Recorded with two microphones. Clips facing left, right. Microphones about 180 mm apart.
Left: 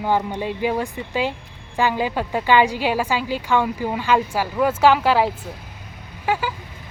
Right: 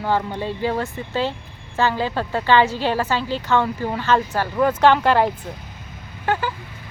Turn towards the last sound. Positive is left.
turn(degrees=10)  # may be behind; listen again after turning